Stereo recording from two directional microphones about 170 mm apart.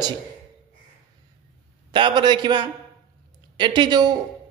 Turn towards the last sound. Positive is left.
turn(degrees=-25)  # may be behind; listen again after turning